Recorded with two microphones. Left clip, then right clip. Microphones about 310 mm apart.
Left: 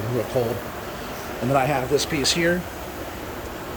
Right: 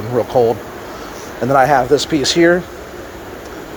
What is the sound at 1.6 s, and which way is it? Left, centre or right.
Speech, centre.